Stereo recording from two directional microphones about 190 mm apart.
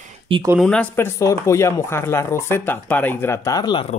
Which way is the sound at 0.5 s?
5° left (ahead or behind).